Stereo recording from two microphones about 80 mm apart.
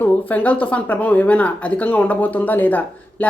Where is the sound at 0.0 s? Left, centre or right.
Left.